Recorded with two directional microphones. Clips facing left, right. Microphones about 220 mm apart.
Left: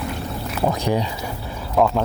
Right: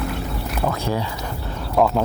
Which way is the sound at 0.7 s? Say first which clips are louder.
Left 4 dB; 15° left (ahead or behind).